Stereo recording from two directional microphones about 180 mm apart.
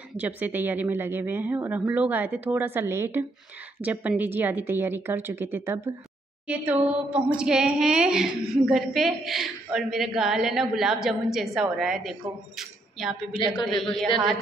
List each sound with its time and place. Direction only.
0.2 s a woman's voice: 10° right (ahead or behind)
13.3 s a man's voice: 25° left (ahead or behind)
13.7 s a woman's voice: centre (ahead or behind)